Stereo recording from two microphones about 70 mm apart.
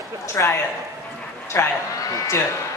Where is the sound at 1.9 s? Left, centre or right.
Left.